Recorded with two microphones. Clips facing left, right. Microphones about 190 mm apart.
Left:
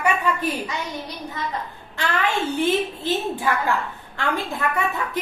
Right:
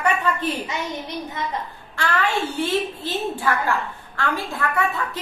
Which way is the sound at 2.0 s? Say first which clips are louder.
Right 1 dB; 20° left (ahead or behind).